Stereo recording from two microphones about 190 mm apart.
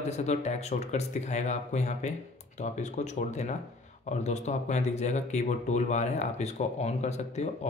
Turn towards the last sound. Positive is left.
turn(degrees=35)  # may be behind; listen again after turning